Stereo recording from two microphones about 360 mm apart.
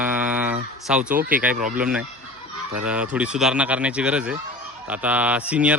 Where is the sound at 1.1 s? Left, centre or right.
Right.